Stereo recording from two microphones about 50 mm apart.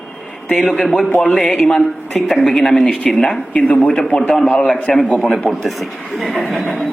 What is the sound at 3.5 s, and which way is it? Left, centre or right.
Speech, left.